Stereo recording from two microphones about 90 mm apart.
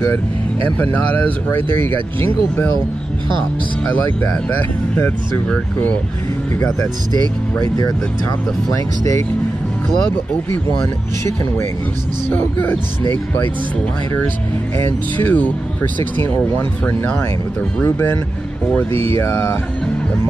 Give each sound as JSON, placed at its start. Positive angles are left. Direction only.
{"t": 7.1, "sound": "speech", "side_deg": -50}
{"t": 12.3, "sound": "speech", "side_deg": 20}
{"t": 14.8, "sound": "speech", "side_deg": 20}